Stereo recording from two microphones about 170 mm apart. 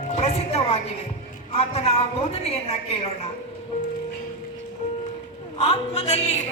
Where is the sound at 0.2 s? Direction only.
40° left (ahead or behind).